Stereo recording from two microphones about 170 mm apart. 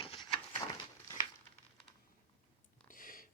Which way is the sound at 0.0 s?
30° left (ahead or behind).